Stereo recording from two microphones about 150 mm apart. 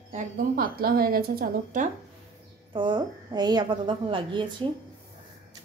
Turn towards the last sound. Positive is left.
turn(degrees=-30)  # may be behind; listen again after turning